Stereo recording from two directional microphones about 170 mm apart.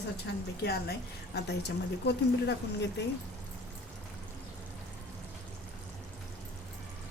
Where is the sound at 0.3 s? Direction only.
80° left.